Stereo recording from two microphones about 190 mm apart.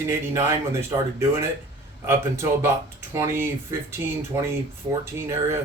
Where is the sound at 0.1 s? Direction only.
15° right (ahead or behind).